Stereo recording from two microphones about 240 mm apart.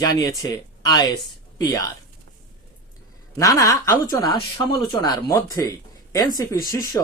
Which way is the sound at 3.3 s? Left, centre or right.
Centre.